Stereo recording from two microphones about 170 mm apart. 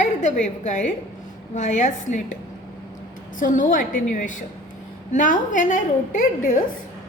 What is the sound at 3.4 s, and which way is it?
A woman's voice, 50° left (ahead or behind).